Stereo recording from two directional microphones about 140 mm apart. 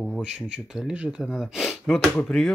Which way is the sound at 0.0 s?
5° right (ahead or behind).